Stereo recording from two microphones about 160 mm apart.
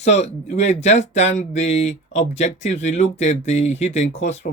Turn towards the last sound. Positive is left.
turn(degrees=45)  # may be behind; listen again after turning